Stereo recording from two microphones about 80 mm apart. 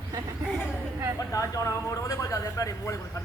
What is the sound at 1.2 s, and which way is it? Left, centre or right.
A man's voice, left.